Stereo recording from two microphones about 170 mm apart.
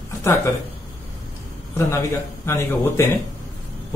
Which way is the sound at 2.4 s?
15° left (ahead or behind).